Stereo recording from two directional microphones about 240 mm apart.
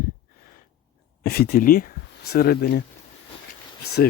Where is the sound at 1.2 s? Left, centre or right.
Left.